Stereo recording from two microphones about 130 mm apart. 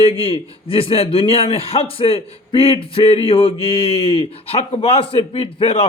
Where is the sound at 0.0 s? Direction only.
45° left (ahead or behind).